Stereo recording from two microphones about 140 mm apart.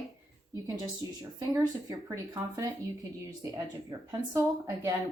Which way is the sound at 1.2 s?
25° right (ahead or behind).